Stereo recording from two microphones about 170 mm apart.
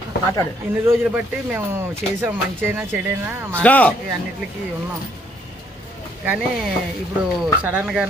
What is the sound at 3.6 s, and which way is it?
Speech, 10° left (ahead or behind).